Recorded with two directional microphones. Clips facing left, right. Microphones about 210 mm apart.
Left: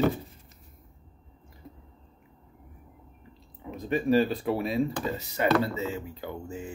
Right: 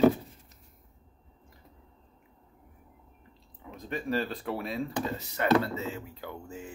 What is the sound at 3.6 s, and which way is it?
Speech, 10° left (ahead or behind).